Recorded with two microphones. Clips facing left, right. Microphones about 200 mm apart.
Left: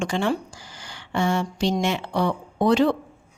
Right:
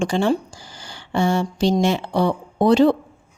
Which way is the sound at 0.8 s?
30° right (ahead or behind).